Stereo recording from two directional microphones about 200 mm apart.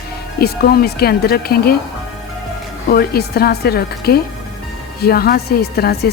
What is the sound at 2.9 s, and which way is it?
Speech, 50° left (ahead or behind).